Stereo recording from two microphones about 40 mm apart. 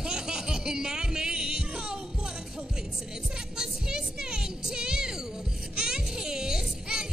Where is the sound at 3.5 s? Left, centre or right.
Centre.